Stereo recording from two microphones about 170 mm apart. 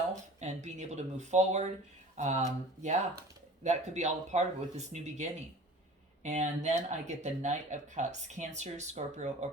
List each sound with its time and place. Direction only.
0.3 s speech: 45° right (ahead or behind)